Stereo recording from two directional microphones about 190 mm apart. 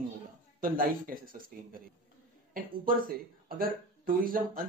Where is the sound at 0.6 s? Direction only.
50° right (ahead or behind).